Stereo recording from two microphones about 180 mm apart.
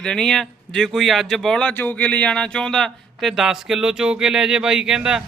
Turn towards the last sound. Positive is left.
turn(degrees=-5)  # may be behind; listen again after turning